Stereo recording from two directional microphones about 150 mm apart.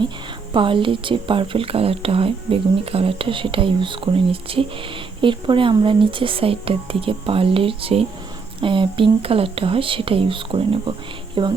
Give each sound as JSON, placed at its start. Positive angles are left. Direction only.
{"t": 0.5, "sound": "speech", "side_deg": -35}